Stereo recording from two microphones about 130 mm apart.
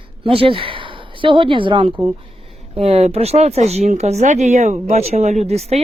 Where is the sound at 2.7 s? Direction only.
50° right (ahead or behind).